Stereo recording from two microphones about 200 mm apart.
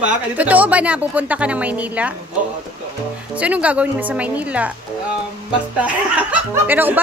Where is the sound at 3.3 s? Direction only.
5° right (ahead or behind).